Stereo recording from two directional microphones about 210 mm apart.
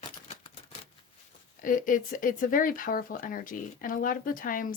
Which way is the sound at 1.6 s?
40° left (ahead or behind).